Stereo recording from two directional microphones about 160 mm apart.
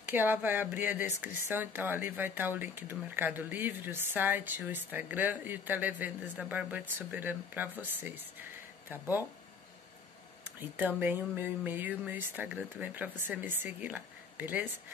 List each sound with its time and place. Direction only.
0.0 s speech: 10° right (ahead or behind)
10.8 s speech: 10° right (ahead or behind)